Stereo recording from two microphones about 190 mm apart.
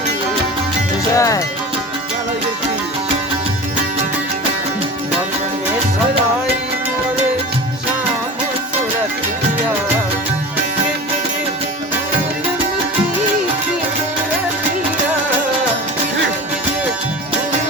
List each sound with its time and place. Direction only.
1.1 s music: 15° left (ahead or behind)